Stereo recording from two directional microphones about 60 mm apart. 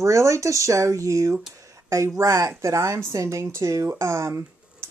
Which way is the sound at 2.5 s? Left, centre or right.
Right.